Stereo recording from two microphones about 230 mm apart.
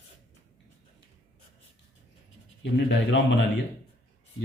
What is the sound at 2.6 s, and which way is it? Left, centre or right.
Speech, left.